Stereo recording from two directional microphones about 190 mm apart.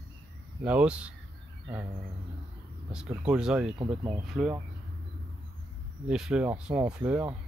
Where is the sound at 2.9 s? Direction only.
5° right (ahead or behind).